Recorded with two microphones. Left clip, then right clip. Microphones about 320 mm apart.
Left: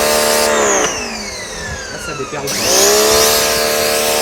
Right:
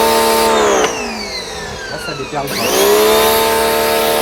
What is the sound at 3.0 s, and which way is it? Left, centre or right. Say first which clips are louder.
Vehicle: right 1 dB; right.